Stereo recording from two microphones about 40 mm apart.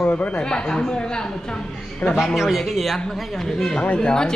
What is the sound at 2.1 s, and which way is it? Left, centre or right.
Speech, centre.